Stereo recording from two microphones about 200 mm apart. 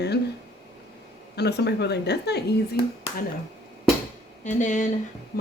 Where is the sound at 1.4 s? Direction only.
55° left (ahead or behind).